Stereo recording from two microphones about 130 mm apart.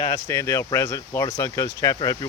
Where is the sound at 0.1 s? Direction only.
20° left (ahead or behind).